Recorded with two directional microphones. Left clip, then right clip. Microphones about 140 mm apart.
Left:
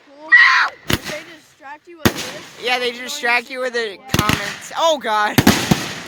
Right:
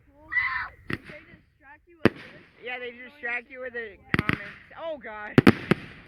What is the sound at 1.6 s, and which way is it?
Speech, 40° right (ahead or behind).